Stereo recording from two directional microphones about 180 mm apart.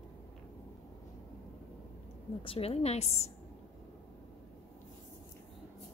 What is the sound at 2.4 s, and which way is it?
Speech, 35° left (ahead or behind).